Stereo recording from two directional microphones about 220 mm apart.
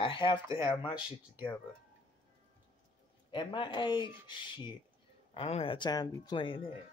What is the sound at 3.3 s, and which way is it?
Speech, 20° left (ahead or behind).